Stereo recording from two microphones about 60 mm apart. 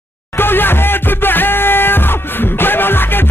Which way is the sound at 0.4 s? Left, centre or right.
Left.